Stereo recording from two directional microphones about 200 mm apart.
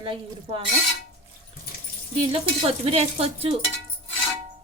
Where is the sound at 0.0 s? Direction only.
25° right (ahead or behind).